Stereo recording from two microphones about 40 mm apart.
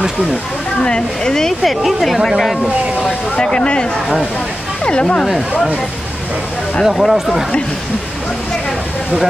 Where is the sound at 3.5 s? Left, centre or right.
Left.